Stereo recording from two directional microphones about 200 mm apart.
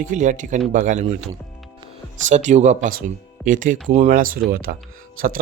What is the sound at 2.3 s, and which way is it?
Speech, 35° right (ahead or behind).